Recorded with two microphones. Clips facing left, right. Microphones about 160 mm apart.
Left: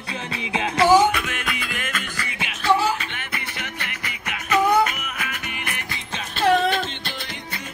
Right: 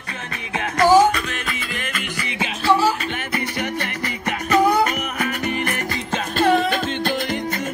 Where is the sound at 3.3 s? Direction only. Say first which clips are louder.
Right 9 dB; 40° right (ahead or behind).